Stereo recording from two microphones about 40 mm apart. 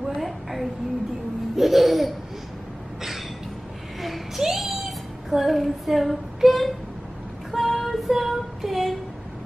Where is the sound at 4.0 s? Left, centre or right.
Centre.